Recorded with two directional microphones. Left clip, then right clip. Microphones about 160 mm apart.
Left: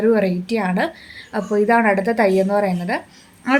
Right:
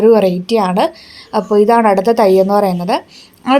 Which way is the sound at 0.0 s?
35° right (ahead or behind).